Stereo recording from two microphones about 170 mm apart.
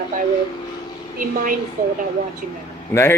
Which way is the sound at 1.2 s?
55° right (ahead or behind).